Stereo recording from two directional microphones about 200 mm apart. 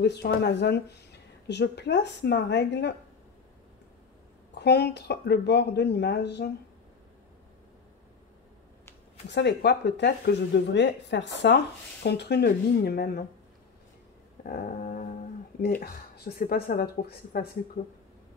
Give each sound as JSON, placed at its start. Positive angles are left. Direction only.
{"t": 0.0, "sound": "speech", "side_deg": 55}
{"t": 4.6, "sound": "speech", "side_deg": 55}
{"t": 9.3, "sound": "speech", "side_deg": 60}
{"t": 14.4, "sound": "dog", "side_deg": 45}
{"t": 15.6, "sound": "speech", "side_deg": 50}